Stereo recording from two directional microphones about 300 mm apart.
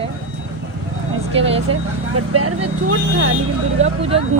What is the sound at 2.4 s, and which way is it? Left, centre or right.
Speech, right.